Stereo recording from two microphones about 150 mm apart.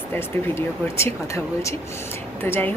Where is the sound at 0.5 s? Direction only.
20° left (ahead or behind).